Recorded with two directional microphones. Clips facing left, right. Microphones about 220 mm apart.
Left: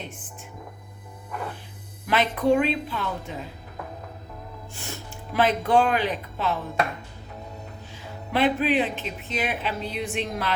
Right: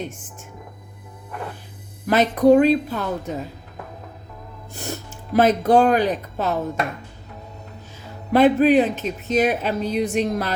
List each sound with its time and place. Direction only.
2.0 s a woman's voice: 40° right (ahead or behind)
4.7 s speech: 40° right (ahead or behind)
8.3 s speech: 40° right (ahead or behind)